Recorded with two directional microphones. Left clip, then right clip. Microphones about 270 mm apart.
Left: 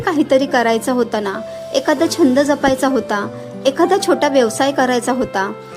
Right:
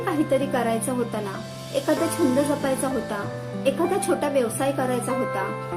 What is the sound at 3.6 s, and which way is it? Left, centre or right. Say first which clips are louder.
A woman's voice: left 9 dB; left.